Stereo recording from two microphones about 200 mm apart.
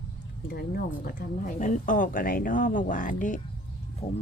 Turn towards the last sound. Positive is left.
turn(degrees=30)  # may be behind; listen again after turning